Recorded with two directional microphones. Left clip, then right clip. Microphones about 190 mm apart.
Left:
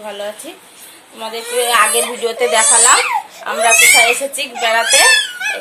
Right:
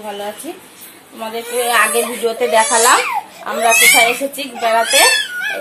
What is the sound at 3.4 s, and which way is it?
Speech, centre (ahead or behind).